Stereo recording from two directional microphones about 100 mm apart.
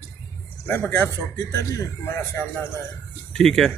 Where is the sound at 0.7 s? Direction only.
20° left (ahead or behind).